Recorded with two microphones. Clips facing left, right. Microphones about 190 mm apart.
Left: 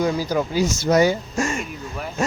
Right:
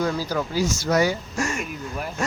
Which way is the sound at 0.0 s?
15° left (ahead or behind).